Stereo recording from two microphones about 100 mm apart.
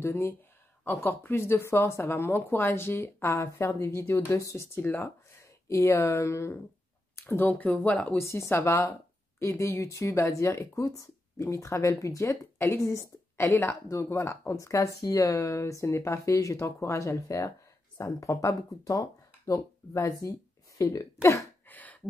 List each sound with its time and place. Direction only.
0.0 s speech: 25° left (ahead or behind)
8.2 s speech: 25° left (ahead or behind)
21.6 s a sound: 15° left (ahead or behind)